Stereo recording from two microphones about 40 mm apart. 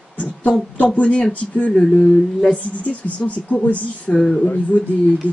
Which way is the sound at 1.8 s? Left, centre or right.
Left.